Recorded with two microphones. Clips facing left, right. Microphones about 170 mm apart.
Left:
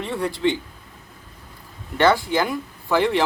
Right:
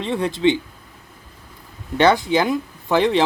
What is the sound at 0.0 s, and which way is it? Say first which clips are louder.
Speech: right 4 dB; 20° right (ahead or behind).